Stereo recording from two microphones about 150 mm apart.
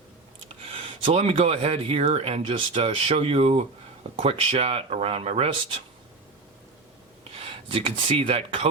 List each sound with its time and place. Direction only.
1.0 s speech: 45° right (ahead or behind)
7.7 s speech: 35° right (ahead or behind)